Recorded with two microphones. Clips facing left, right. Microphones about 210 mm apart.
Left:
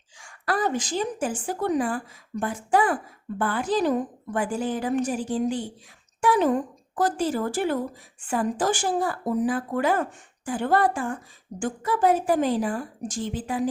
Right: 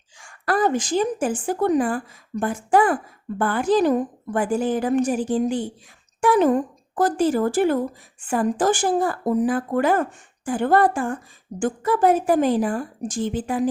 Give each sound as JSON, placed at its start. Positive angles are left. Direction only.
{"t": 0.2, "sound": "speech", "side_deg": -50}